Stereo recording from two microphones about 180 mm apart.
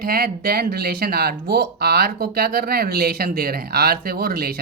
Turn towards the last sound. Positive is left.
turn(degrees=-60)  # may be behind; listen again after turning